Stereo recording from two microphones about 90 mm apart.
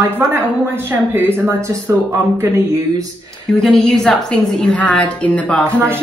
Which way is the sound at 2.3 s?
30° right (ahead or behind).